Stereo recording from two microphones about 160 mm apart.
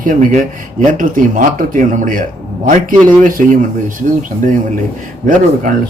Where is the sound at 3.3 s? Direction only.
55° right (ahead or behind).